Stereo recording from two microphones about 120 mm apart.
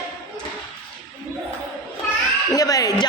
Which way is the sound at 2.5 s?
30° left (ahead or behind).